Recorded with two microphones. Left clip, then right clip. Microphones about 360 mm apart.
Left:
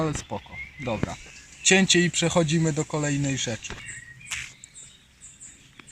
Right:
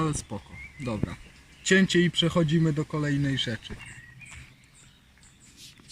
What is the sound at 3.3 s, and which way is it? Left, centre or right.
Speech, left.